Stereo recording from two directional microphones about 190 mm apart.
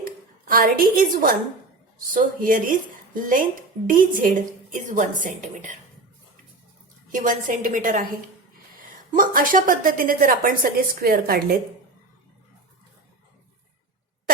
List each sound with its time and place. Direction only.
0.0 s a sound: 50° right (ahead or behind)
2.1 s a woman's voice: 45° right (ahead or behind)
7.1 s a woman's voice: 45° right (ahead or behind)